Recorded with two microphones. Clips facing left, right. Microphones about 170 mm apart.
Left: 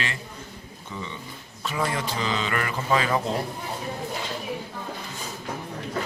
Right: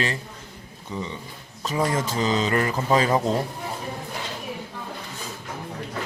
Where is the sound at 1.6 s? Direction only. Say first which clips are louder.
Right 4 dB; 40° right (ahead or behind).